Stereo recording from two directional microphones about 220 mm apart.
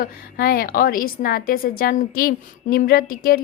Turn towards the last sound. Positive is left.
turn(degrees=40)  # may be behind; listen again after turning